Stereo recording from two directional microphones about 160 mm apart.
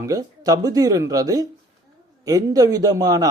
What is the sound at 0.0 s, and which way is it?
A man's voice, 20° right (ahead or behind).